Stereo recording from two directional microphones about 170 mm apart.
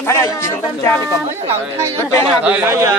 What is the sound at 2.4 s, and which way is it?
Speech, 10° right (ahead or behind).